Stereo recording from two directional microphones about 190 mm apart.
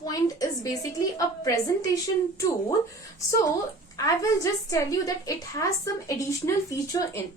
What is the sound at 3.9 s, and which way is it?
A woman's voice, 15° left (ahead or behind).